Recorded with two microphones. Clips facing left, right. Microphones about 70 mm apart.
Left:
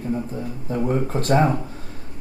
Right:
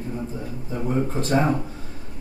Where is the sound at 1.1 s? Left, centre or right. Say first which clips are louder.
Left 3 dB; left.